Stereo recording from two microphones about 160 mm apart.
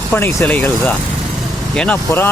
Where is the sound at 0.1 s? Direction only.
15° left (ahead or behind).